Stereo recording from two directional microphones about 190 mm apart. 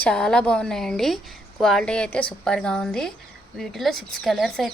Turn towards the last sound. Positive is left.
turn(degrees=0)  # may be behind; listen again after turning